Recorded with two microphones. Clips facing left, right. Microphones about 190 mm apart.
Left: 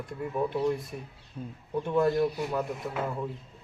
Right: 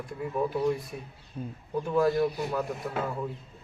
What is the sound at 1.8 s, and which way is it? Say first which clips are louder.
Speech: even; centre (ahead or behind).